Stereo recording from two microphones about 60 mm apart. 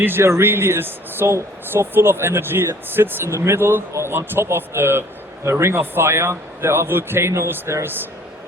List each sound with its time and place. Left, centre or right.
0.0 s a man's voice: right